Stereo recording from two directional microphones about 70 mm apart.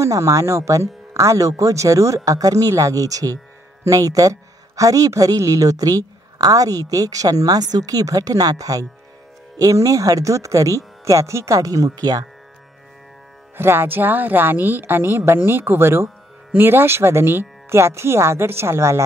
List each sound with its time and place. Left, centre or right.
0.0 s speech: right
13.6 s speech: right